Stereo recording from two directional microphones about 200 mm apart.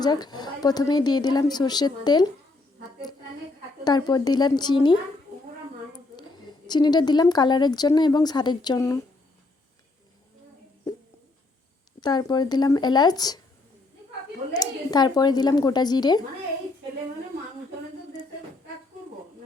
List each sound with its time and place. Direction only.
0.0 s a woman's voice: 20° left (ahead or behind)
3.8 s a woman's voice: 20° left (ahead or behind)
6.7 s a woman's voice: 20° left (ahead or behind)
11.9 s a woman's voice: 20° left (ahead or behind)
14.6 s a woman's voice: 20° left (ahead or behind)